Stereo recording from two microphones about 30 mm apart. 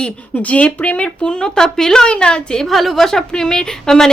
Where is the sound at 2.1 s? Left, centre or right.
Left.